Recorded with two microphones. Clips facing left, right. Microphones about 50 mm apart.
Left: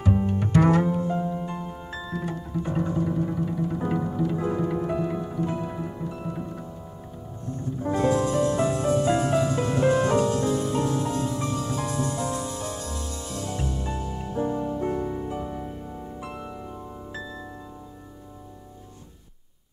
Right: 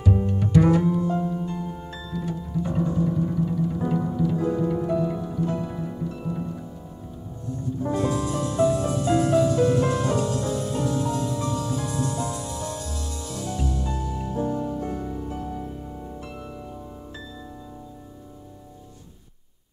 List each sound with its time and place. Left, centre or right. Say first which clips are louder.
0.0 s double bass: even; left
0.5 s music: right 1 dB; left
1.0 s music: right 2 dB; left
7.9 s music: left 4 dB; left
8.8 s music: even; left
12.4 s music: even; left